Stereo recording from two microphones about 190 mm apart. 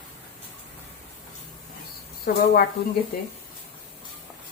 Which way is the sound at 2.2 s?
50° left (ahead or behind).